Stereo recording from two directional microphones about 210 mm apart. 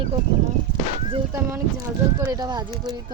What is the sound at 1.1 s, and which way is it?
A woman's voice, 15° right (ahead or behind).